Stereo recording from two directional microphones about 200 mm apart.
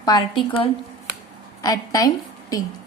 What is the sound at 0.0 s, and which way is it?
A woman's voice, 20° left (ahead or behind).